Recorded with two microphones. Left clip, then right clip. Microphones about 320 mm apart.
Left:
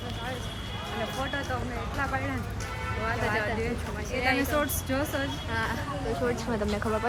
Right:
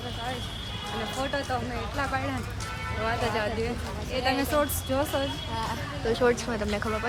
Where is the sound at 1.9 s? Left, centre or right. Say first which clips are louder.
Right 1 dB; right.